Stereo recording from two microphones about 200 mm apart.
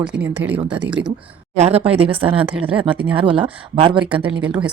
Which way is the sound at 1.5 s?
30° right (ahead or behind).